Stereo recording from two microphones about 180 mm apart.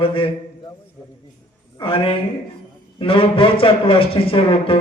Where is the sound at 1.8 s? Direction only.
30° left (ahead or behind).